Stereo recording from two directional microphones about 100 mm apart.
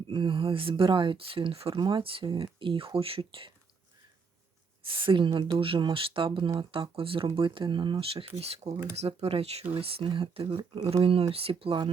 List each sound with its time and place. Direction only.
0.1 s speech: 55° right (ahead or behind)
4.8 s speech: 60° right (ahead or behind); by 8.7 s 90° right
8.7 s speech: 30° right (ahead or behind)
9.0 s speech: 90° right
9.7 s speech: 70° right (ahead or behind)